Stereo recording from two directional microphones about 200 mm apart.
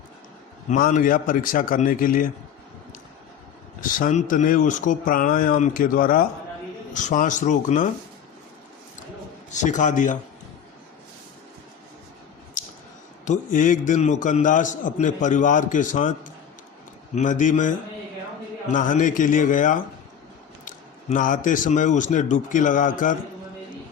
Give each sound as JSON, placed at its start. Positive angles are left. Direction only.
{"t": 0.7, "sound": "speech", "side_deg": 40}
{"t": 3.8, "sound": "a man's voice", "side_deg": 45}
{"t": 9.5, "sound": "a man's voice", "side_deg": 40}
{"t": 13.2, "sound": "a man's voice", "side_deg": 40}